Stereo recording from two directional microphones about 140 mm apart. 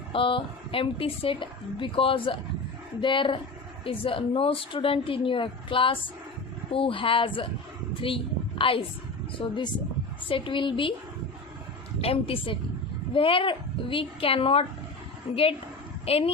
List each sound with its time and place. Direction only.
0.1 s a woman's voice: 40° left (ahead or behind)
11.9 s a woman's voice: 45° left (ahead or behind)